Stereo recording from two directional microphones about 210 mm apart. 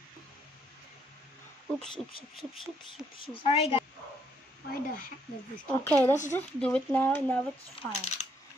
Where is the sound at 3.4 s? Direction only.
30° left (ahead or behind).